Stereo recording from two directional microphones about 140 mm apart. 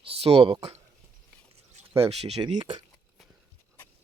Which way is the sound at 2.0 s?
45° right (ahead or behind).